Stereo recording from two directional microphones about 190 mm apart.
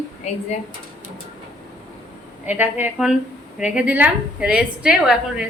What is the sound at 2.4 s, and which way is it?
A woman's voice, 10° right (ahead or behind).